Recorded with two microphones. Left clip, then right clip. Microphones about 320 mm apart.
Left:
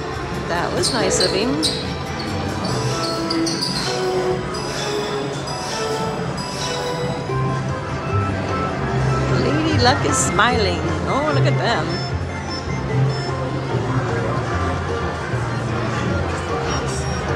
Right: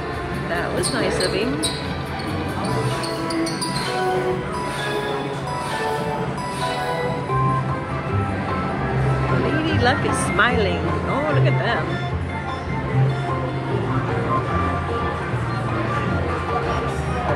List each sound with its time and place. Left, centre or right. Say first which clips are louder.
0.6 s speech: left 3 dB; centre
9.7 s speech: left 3 dB; centre